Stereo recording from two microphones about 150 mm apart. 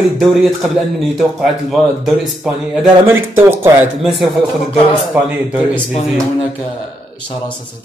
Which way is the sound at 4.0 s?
Centre (ahead or behind).